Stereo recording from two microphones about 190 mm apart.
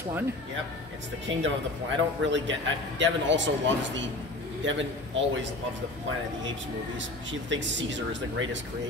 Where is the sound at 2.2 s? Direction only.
80° right.